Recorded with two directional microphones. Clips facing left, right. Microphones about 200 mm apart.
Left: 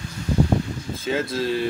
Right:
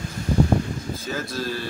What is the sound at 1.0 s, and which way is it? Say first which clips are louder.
Speech: left 8 dB; 25° left (ahead or behind).